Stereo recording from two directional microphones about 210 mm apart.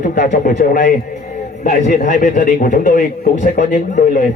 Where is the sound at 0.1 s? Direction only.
40° left (ahead or behind).